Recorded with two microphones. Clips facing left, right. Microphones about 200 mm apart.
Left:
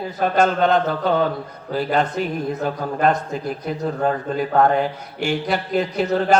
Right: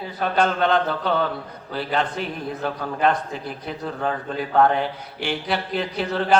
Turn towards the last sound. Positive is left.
turn(degrees=45)  # may be behind; listen again after turning